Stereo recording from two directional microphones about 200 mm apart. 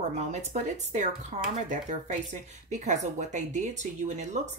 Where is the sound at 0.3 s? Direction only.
35° right (ahead or behind).